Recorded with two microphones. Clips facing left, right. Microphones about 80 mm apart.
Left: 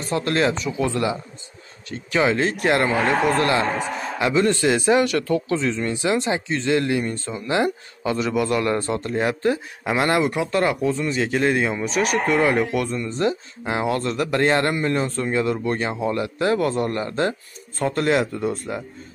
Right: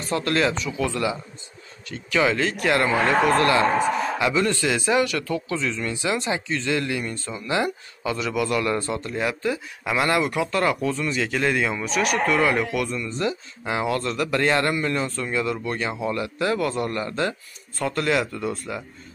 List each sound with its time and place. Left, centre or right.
0.0 s speech: left